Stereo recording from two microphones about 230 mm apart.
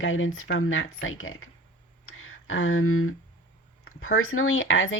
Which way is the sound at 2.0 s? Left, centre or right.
Left.